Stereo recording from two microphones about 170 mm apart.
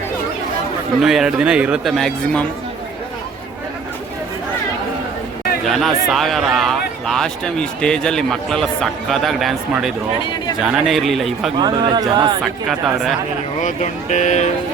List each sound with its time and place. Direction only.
0.9 s a man's voice: centre (ahead or behind)
5.6 s a man's voice: centre (ahead or behind)
11.5 s speech: 25° right (ahead or behind)
12.4 s a man's voice: 5° right (ahead or behind)
13.6 s speech: 45° left (ahead or behind)